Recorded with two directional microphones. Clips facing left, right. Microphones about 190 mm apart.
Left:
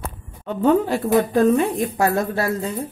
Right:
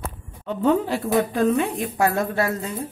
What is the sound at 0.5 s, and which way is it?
Speech, 50° left (ahead or behind).